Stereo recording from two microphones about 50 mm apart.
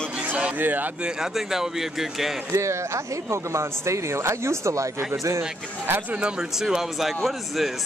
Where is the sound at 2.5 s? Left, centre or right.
Right.